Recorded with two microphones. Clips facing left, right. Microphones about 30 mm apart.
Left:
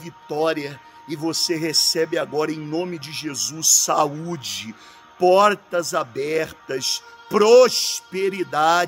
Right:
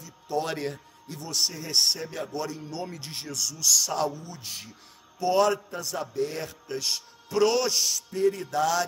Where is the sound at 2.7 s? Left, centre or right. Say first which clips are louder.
Left 9 dB; left.